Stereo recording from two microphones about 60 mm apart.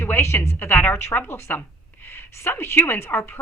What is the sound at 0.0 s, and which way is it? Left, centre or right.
A woman's voice, left.